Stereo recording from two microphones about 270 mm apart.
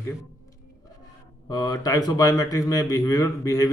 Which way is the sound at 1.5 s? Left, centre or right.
Centre.